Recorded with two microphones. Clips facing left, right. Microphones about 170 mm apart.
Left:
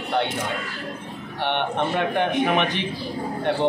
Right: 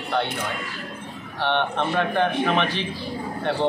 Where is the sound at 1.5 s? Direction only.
15° left (ahead or behind).